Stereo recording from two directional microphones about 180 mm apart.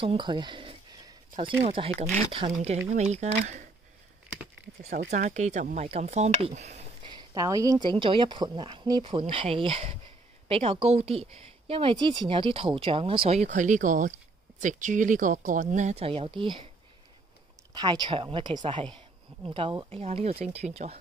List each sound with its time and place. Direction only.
0.0 s a sound: 25° right (ahead or behind)
1.6 s speech: 35° right (ahead or behind)
5.1 s speech: 40° right (ahead or behind)
17.7 s speech: 25° right (ahead or behind)